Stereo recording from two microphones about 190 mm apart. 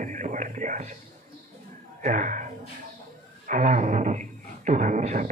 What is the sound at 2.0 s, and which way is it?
Speech, 45° right (ahead or behind).